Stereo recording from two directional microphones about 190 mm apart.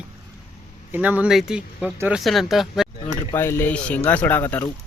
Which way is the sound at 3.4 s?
10° left (ahead or behind).